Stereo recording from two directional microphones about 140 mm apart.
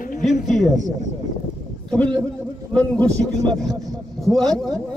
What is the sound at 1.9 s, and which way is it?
A man's voice, 5° left (ahead or behind).